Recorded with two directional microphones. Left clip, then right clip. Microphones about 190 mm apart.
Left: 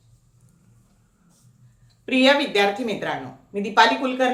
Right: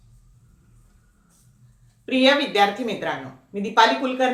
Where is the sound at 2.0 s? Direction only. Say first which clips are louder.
Even; 15° left (ahead or behind).